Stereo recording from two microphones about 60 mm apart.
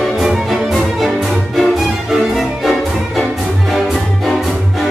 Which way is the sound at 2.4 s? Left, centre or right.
Centre.